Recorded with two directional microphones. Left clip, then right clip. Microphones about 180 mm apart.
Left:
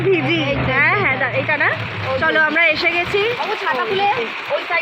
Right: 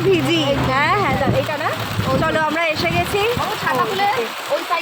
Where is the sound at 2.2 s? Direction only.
10° right (ahead or behind).